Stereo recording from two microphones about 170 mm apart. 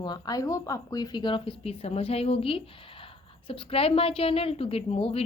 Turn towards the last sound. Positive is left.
turn(degrees=35)  # may be behind; listen again after turning